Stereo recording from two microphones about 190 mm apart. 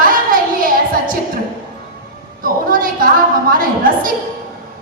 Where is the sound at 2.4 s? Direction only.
50° right (ahead or behind).